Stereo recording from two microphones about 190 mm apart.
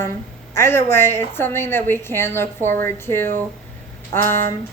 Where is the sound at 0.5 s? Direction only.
10° left (ahead or behind).